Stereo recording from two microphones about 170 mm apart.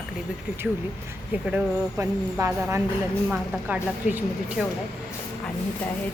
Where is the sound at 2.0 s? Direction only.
15° right (ahead or behind).